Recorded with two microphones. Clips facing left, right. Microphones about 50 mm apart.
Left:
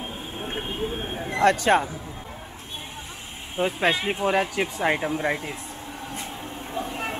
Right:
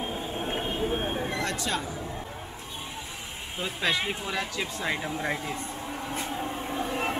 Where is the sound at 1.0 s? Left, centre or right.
Centre.